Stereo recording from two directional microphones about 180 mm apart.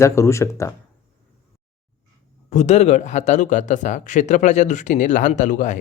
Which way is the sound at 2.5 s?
40° left (ahead or behind).